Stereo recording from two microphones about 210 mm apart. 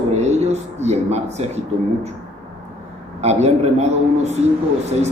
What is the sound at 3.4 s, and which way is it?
Speech, 30° right (ahead or behind).